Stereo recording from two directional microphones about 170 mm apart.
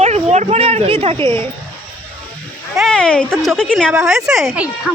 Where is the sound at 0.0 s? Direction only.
40° right (ahead or behind).